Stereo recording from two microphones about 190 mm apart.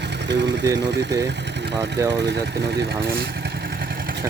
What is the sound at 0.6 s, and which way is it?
Speech, 15° right (ahead or behind).